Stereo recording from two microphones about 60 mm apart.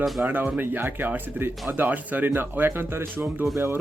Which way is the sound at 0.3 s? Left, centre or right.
Right.